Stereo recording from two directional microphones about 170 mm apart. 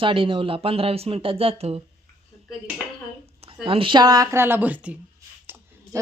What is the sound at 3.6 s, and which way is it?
Speech, 30° right (ahead or behind).